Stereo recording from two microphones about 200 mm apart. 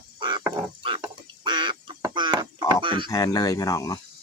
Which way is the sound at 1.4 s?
25° right (ahead or behind).